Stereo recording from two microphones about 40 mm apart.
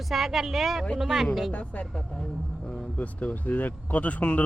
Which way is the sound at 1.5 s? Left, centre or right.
Left.